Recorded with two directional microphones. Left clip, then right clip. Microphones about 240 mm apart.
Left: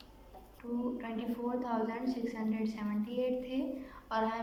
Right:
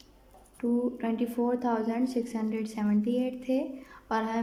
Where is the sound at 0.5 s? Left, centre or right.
Right.